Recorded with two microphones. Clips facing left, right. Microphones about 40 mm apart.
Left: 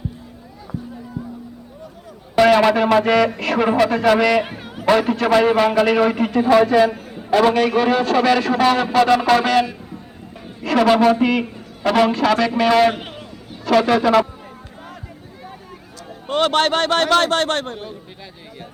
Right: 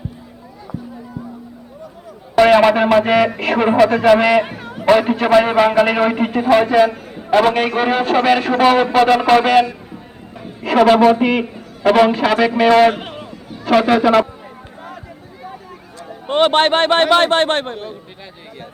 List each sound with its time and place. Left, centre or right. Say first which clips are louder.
2.4 s a man's voice: right 3 dB; centre
4.2 s a man's voice: right 3 dB; right
12.9 s a sound: right 4 dB; centre
13.7 s a man's voice: right 2 dB; centre
16.0 s a man's voice: right 4 dB; centre